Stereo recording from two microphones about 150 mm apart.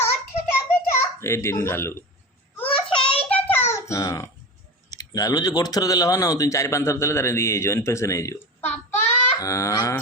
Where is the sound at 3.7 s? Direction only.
20° left (ahead or behind).